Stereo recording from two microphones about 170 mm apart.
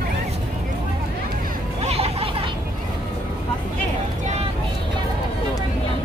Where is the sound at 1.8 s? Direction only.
35° right (ahead or behind).